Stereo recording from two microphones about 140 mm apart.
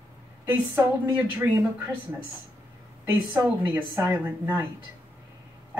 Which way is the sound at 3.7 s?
15° right (ahead or behind).